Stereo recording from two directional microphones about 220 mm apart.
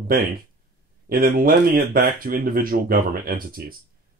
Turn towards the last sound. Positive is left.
turn(degrees=-40)  # may be behind; listen again after turning